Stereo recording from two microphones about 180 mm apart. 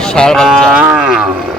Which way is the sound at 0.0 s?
5° left (ahead or behind).